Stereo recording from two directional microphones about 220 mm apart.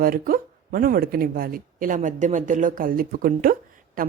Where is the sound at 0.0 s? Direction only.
40° right (ahead or behind).